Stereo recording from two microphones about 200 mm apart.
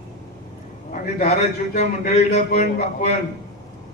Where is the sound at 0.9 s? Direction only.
35° left (ahead or behind).